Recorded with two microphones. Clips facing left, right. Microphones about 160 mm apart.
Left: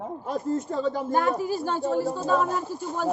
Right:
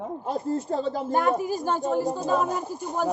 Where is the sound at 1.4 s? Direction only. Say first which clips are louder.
Right 1 dB; 45° right (ahead or behind).